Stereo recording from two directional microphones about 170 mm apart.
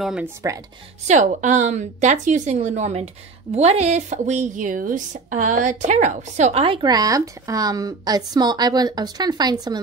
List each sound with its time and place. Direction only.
0.0 s speech: 5° right (ahead or behind)
1.0 s a woman's voice: 45° right (ahead or behind); by 9.8 s 25° right (ahead or behind)